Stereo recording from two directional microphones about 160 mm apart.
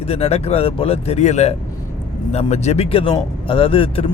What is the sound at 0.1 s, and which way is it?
Speech, 40° left (ahead or behind).